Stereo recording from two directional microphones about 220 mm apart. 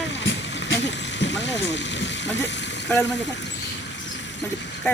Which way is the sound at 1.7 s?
55° left (ahead or behind).